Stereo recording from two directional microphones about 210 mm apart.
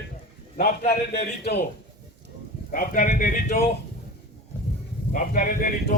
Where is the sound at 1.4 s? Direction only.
50° left (ahead or behind).